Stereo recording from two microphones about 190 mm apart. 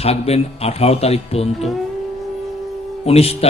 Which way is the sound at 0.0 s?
30° left (ahead or behind).